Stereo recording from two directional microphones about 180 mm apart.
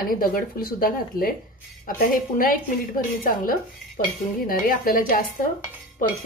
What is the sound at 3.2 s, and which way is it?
Speech, 50° left (ahead or behind).